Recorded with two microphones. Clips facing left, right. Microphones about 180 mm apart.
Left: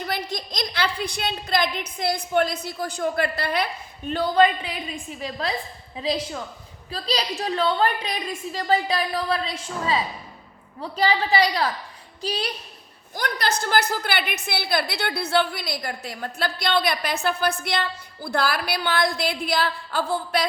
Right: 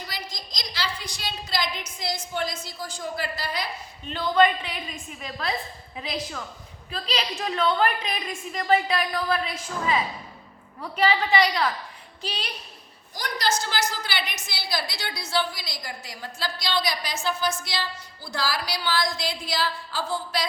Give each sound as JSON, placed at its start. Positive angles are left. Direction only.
{"t": 0.1, "sound": "a woman's voice", "side_deg": 60}
{"t": 4.9, "sound": "a woman's voice", "side_deg": 35}
{"t": 13.1, "sound": "a woman's voice", "side_deg": 60}